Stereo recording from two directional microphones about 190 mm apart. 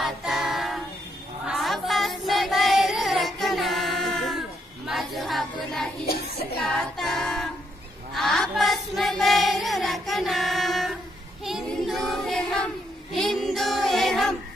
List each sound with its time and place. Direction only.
0.0 s music: centre (ahead or behind)
1.5 s child singing: centre (ahead or behind)
6.0 s child singing: 55° left (ahead or behind)
6.6 s a capella: centre (ahead or behind)
8.1 s a sound: centre (ahead or behind)
11.4 s child singing: centre (ahead or behind)